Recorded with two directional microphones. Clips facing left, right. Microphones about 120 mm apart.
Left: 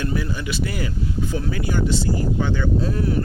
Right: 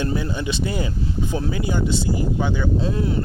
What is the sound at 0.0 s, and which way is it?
Speech, 25° right (ahead or behind).